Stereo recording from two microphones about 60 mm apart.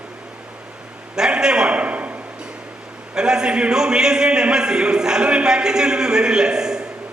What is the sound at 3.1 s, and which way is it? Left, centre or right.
A man's voice, centre.